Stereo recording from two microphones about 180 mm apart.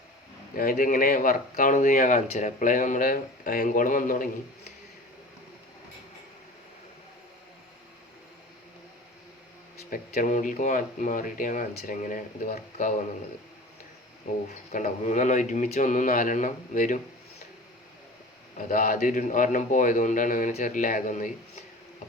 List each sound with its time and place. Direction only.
0.5 s speech: 50° left (ahead or behind)
9.9 s speech: 45° left (ahead or behind)
14.7 s speech: 45° left (ahead or behind)
18.5 s speech: 50° left (ahead or behind)